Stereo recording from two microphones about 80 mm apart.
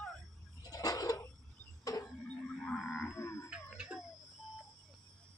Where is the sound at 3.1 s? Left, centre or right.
Left.